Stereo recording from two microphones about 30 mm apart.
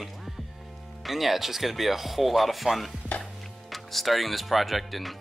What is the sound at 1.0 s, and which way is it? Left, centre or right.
Speech, centre.